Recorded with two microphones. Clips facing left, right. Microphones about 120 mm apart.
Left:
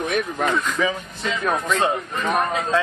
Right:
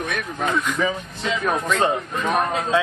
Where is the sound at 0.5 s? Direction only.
Centre (ahead or behind).